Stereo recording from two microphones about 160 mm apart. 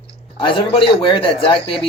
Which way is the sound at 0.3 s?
35° left (ahead or behind).